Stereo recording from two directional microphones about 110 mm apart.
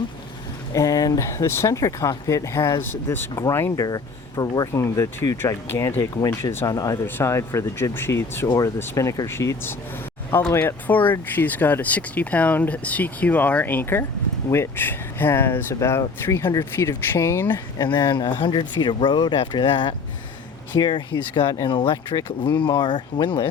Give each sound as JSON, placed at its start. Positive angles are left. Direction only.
{"t": 0.7, "sound": "speech", "side_deg": 30}
{"t": 3.8, "sound": "speech", "side_deg": 35}
{"t": 17.8, "sound": "speech", "side_deg": 40}